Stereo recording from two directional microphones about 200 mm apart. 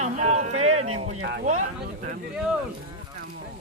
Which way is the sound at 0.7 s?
90° right.